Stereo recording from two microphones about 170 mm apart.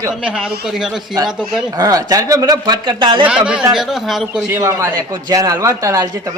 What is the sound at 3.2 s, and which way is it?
A man's voice, 5° right (ahead or behind).